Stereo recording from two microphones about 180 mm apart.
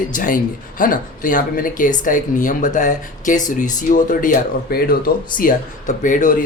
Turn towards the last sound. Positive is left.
turn(degrees=45)  # may be behind; listen again after turning